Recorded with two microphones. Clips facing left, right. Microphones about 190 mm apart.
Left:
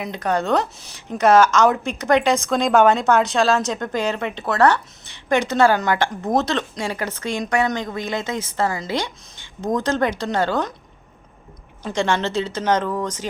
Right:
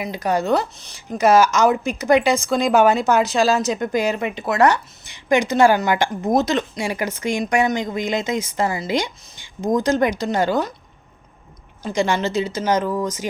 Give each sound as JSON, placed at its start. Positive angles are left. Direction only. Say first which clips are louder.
{"t": 0.0, "sound": "a woman's voice", "louder": "right 1 dB", "side_deg": -10}
{"t": 0.8, "sound": "speech", "louder": "left 1 dB", "side_deg": 5}
{"t": 1.2, "sound": "a woman's voice", "louder": "even", "side_deg": -5}
{"t": 11.8, "sound": "a woman's voice", "louder": "right 1 dB", "side_deg": -10}